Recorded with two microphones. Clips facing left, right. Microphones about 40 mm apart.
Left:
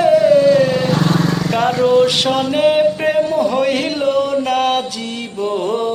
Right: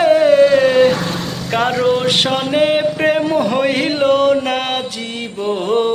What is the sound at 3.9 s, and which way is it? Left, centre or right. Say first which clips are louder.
Music: right 3 dB; right.